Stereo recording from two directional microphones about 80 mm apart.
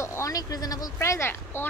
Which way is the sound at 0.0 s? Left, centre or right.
Left.